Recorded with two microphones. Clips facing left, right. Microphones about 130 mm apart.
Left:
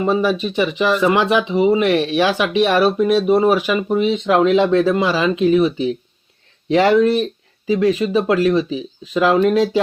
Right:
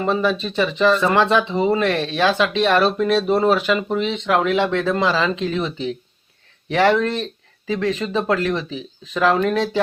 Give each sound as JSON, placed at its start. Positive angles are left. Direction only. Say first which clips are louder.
{"t": 0.0, "sound": "speech", "louder": "left 3 dB", "side_deg": 10}